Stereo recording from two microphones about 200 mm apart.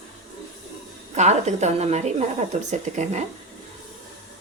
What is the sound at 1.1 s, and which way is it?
Speech, 35° right (ahead or behind).